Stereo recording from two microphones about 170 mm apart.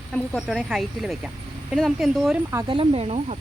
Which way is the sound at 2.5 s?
25° right (ahead or behind).